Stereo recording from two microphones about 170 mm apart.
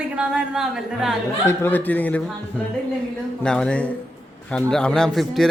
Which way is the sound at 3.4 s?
5° left (ahead or behind).